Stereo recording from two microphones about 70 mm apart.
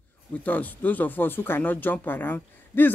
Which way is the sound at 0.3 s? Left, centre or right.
Left.